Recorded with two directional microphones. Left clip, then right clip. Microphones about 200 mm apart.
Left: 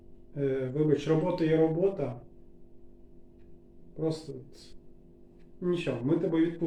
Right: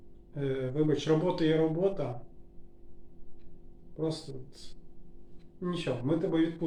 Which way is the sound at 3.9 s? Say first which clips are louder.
Left 2 dB; centre (ahead or behind).